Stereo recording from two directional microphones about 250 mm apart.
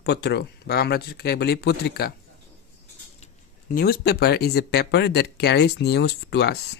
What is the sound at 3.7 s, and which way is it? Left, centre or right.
Speech, left.